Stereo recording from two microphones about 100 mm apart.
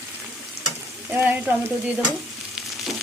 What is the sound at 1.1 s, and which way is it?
Frying, 15° right (ahead or behind).